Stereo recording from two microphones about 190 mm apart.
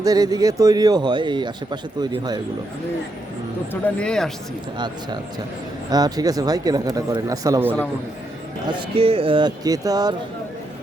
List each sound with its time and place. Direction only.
0.0 s speech: 20° right (ahead or behind)
3.7 s speech: 5° left (ahead or behind)
5.9 s speech: 20° right (ahead or behind)
8.6 s speech: 30° right (ahead or behind)